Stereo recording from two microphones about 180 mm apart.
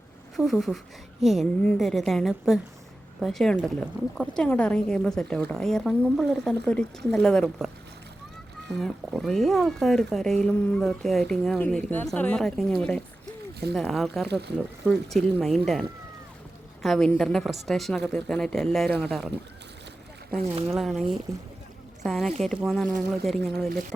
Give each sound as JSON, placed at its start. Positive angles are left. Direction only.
{"t": 0.3, "sound": "speech", "side_deg": 0}
{"t": 9.0, "sound": "speech", "side_deg": 0}
{"t": 20.7, "sound": "speech", "side_deg": 0}
{"t": 23.6, "sound": "speech", "side_deg": -60}